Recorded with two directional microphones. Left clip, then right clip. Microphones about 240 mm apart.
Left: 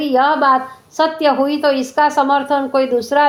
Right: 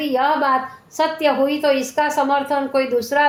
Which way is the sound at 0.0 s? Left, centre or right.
Left.